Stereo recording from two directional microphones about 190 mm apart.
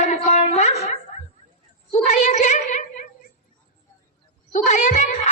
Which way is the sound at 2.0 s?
35° left (ahead or behind).